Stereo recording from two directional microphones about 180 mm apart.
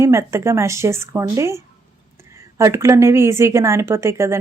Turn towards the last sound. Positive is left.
turn(degrees=-15)  # may be behind; listen again after turning